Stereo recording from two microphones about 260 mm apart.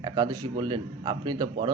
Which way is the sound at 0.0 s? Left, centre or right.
Centre.